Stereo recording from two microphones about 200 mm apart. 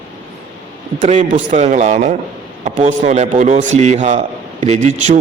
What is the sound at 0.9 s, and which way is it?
A man's voice, 40° right (ahead or behind).